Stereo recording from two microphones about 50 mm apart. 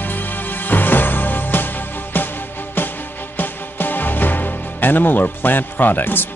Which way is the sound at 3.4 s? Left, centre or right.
Left.